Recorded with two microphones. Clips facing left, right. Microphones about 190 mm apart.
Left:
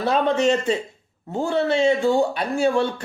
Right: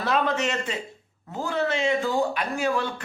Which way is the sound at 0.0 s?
30° left (ahead or behind).